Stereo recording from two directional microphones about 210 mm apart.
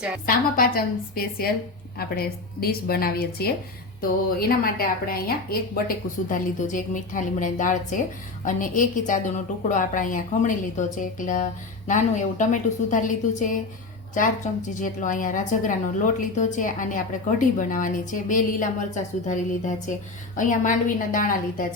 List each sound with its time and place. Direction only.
0.3 s a woman's voice: 45° left (ahead or behind)